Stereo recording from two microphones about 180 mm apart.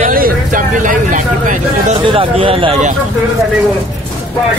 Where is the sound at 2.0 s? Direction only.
30° right (ahead or behind).